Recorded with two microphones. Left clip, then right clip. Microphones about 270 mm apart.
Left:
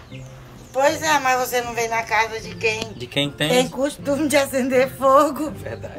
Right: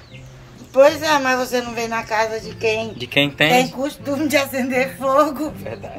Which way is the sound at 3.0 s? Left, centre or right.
Centre.